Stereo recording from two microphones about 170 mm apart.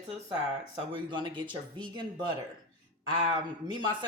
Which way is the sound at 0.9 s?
30° right (ahead or behind).